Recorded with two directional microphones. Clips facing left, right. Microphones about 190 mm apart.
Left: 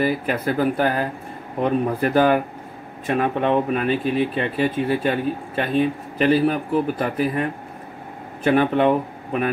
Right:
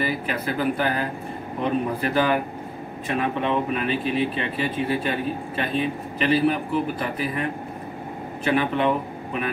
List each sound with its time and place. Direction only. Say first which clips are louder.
0.0 s speech: left 5 dB; 45° left (ahead or behind)
8.5 s speech: left 5 dB; 45° left (ahead or behind)